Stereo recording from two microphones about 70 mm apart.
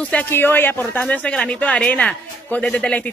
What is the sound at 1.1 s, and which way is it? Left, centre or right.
Speech, centre.